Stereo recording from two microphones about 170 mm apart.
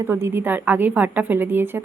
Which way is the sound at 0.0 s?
15° right (ahead or behind).